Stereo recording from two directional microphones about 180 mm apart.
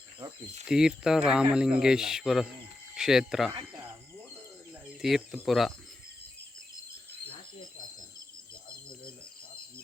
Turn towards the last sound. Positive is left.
turn(degrees=40)  # may be behind; listen again after turning